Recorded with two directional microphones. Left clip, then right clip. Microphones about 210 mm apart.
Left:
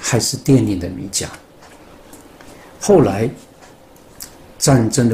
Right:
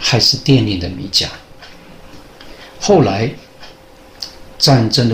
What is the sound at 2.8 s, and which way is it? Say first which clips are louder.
Speech: right 1 dB; 30° left (ahead or behind).